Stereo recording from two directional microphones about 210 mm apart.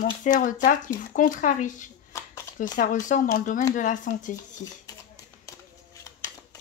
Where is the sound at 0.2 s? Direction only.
35° left (ahead or behind).